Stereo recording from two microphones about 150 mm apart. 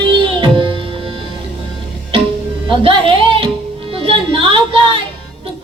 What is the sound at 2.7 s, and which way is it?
Music, 40° right (ahead or behind).